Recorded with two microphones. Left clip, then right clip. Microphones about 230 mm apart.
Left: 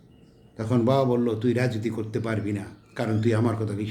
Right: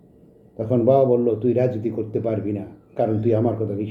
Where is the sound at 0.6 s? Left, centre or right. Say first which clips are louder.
Right 5 dB; left.